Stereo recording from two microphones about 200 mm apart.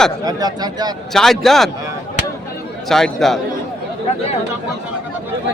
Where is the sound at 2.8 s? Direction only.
Centre (ahead or behind).